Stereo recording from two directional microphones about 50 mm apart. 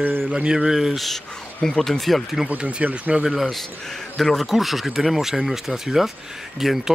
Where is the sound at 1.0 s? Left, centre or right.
Centre.